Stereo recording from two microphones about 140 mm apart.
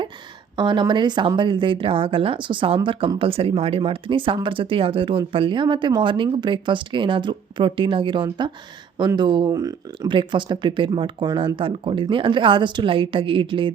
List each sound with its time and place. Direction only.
0.5 s speech: 35° right (ahead or behind)